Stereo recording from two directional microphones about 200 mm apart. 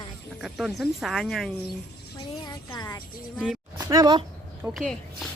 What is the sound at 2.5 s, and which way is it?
Speech, 20° left (ahead or behind).